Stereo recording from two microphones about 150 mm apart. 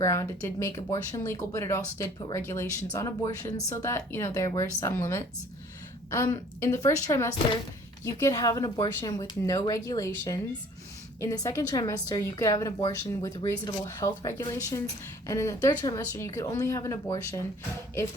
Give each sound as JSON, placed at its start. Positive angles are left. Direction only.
{"t": 0.0, "sound": "a woman's voice", "side_deg": 20}